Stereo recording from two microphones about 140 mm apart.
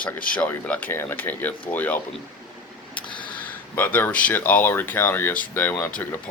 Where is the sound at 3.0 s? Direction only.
35° left (ahead or behind).